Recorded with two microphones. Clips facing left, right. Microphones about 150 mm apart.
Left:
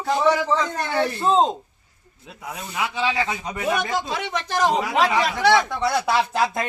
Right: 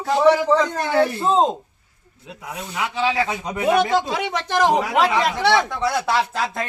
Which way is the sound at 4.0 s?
85° right.